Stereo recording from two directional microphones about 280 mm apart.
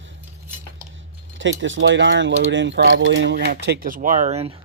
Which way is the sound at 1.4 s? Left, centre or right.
Right.